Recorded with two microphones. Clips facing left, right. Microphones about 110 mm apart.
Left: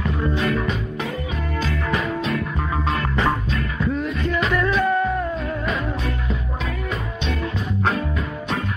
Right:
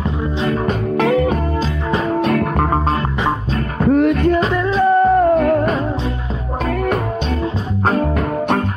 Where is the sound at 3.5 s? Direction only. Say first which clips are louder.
Right 8 dB; 55° right (ahead or behind).